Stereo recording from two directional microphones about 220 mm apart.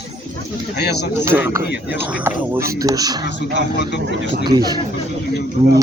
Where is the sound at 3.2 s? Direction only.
50° left (ahead or behind).